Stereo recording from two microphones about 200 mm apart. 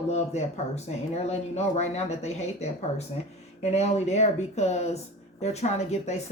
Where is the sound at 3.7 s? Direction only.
35° left (ahead or behind).